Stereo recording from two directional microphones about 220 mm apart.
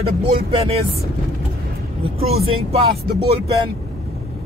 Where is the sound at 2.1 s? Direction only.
25° right (ahead or behind).